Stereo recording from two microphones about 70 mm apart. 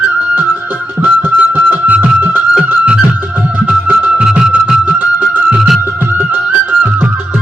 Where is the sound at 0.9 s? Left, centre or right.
Right.